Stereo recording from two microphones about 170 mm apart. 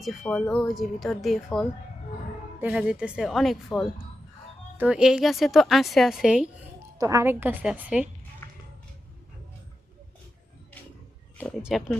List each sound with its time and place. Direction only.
0.0 s speech: 5° left (ahead or behind)
7.0 s a woman's voice: 15° right (ahead or behind)
8.4 s a sound: 15° left (ahead or behind)
11.6 s speech: centre (ahead or behind)